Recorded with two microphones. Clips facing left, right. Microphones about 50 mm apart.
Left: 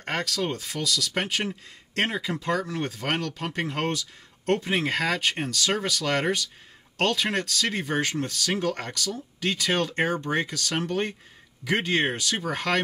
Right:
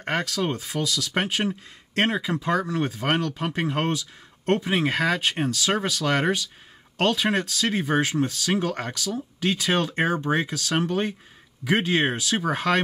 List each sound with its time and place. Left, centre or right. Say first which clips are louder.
0.0 s speech: right 2 dB; centre